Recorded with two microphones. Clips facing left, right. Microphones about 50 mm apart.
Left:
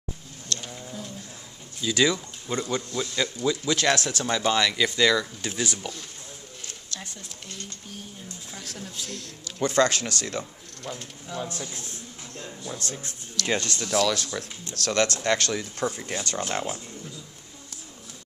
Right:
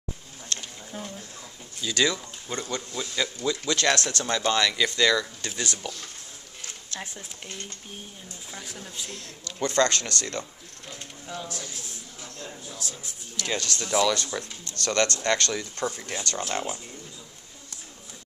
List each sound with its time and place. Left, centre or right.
0.5 s a sound: right
1.8 s speech: centre
6.9 s speech: right
8.5 s speech: centre
9.6 s speech: centre
11.4 s a man's voice: left
12.6 s speech: left
13.5 s speech: left
13.7 s speech: centre